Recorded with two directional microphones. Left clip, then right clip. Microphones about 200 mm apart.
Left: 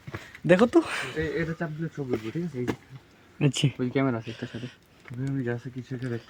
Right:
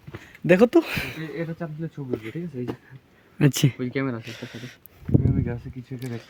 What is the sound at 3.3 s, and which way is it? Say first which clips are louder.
Speech: right 4 dB; 45° right (ahead or behind).